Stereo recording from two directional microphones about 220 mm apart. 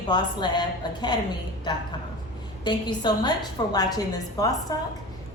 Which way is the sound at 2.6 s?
20° left (ahead or behind).